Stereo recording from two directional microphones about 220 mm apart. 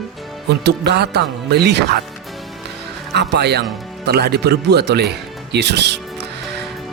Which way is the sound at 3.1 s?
50° right (ahead or behind).